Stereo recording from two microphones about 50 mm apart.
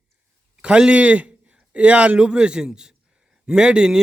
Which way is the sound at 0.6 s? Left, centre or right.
Right.